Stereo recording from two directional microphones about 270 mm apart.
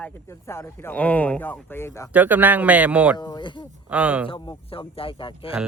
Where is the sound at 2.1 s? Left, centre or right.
Centre.